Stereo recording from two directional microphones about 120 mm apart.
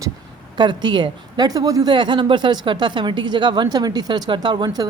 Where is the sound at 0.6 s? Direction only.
40° right (ahead or behind).